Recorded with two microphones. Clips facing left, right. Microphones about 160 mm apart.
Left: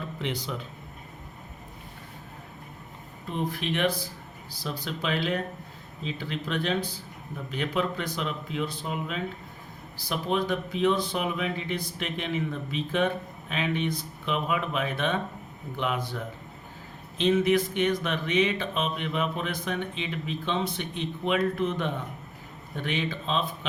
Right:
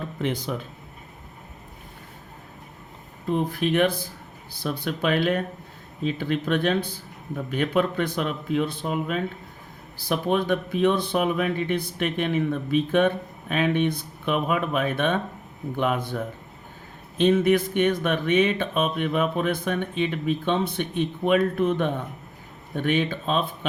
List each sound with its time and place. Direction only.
0.2 s speech: 50° right (ahead or behind)
3.6 s speech: 50° right (ahead or behind)